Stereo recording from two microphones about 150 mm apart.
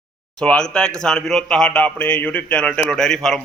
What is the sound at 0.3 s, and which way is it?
A man's voice, 5° left (ahead or behind).